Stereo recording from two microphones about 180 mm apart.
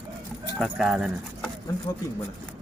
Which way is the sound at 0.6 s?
Centre (ahead or behind).